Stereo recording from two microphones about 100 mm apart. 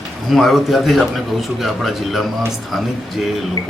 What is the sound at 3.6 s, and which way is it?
Music, 35° left (ahead or behind).